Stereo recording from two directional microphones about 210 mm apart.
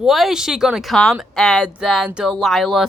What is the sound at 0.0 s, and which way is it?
Speech, centre (ahead or behind).